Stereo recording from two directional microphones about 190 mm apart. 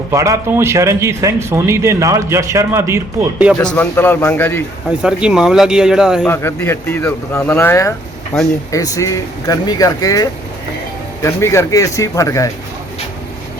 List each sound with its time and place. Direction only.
0.1 s a man's voice: 15° right (ahead or behind)
3.8 s speech: 10° left (ahead or behind)
5.0 s speech: 5° right (ahead or behind)
6.2 s speech: 10° left (ahead or behind)